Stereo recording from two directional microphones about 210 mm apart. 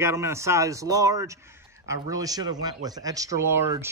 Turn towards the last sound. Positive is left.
turn(degrees=-10)  # may be behind; listen again after turning